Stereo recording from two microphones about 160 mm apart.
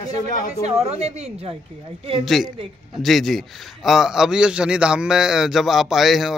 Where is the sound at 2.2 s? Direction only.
Centre (ahead or behind).